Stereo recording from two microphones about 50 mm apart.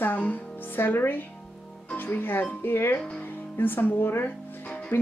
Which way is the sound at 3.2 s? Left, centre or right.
Left.